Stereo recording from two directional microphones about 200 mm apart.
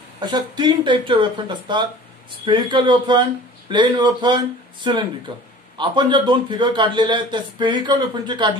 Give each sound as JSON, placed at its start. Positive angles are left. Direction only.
{"t": 0.2, "sound": "a man's voice", "side_deg": -20}